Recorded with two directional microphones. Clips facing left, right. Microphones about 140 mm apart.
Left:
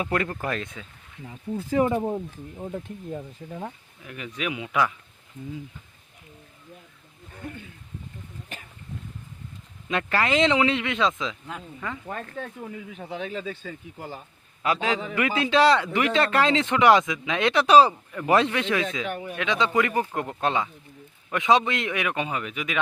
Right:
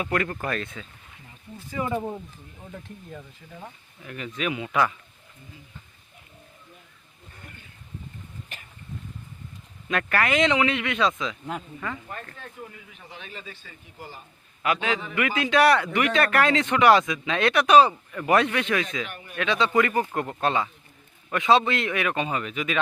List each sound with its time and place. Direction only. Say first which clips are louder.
0.0 s a man's voice: even; 25° left (ahead or behind)
1.2 s speech: left 13 dB; 90° left
1.9 s a man's voice: left 3 dB; 20° left (ahead or behind)
4.0 s a man's voice: right 2 dB; 10° left (ahead or behind)
9.9 s a man's voice: even; 25° left (ahead or behind)
14.6 s a man's voice: left 1 dB; 30° left (ahead or behind)
17.5 s a man's voice: left 1 dB; 30° left (ahead or behind); by 22.8 s 10° left (ahead or behind)